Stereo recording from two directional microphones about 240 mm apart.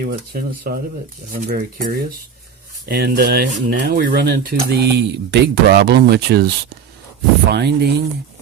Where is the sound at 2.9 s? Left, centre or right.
Right.